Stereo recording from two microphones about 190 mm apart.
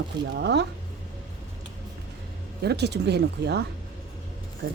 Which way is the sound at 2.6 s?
60° right (ahead or behind).